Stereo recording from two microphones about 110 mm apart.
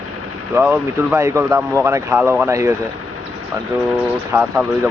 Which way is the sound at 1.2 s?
25° right (ahead or behind).